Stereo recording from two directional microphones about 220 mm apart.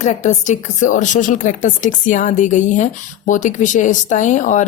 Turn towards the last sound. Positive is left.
turn(degrees=35)  # may be behind; listen again after turning